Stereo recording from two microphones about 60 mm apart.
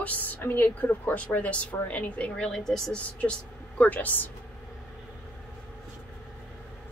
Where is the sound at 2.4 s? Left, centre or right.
Centre.